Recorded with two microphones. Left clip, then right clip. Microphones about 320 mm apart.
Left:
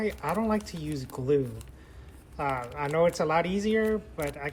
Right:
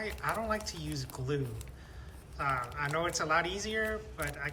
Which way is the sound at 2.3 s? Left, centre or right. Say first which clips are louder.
Left 3 dB; centre.